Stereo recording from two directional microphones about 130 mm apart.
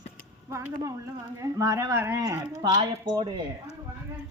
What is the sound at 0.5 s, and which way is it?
Speech, 20° right (ahead or behind).